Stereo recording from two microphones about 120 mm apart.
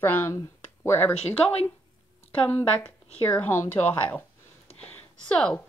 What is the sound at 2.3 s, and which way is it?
Speech, 15° left (ahead or behind).